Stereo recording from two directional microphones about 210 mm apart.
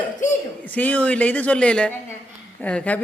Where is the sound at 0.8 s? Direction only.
5° left (ahead or behind).